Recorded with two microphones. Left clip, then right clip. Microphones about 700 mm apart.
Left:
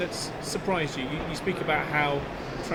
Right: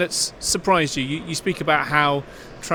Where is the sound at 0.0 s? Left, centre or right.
Right.